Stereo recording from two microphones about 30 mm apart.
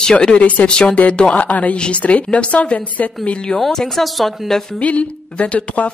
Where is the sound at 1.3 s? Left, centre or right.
Left.